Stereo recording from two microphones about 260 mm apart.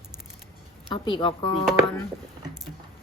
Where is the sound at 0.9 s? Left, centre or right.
Centre.